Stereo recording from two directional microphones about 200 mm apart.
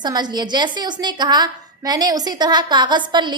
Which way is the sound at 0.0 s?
20° right (ahead or behind).